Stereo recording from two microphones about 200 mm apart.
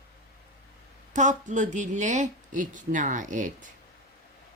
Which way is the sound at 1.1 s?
40° right (ahead or behind).